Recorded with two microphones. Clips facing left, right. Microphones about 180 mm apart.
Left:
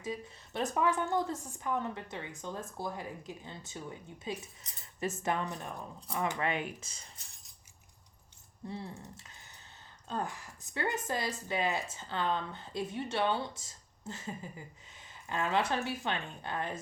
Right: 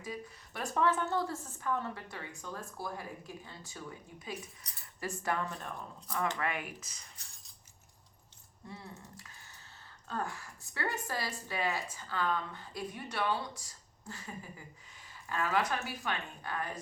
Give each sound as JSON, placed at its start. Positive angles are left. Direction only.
{"t": 0.0, "sound": "a woman's voice", "side_deg": 25}
{"t": 8.6, "sound": "a woman's voice", "side_deg": 30}